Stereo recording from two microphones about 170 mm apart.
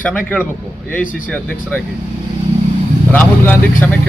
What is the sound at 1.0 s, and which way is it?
Speech, 50° left (ahead or behind).